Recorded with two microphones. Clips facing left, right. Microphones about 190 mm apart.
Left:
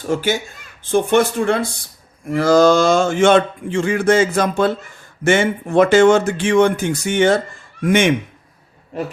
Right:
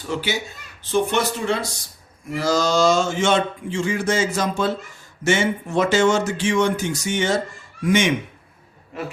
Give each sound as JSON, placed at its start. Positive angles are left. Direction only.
{"t": 0.0, "sound": "speech", "side_deg": 45}